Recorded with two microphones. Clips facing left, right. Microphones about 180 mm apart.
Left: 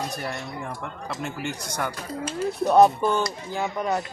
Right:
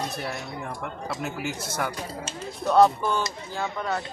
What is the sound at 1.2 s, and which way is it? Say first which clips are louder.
Speech: left 1 dB; 5° right (ahead or behind).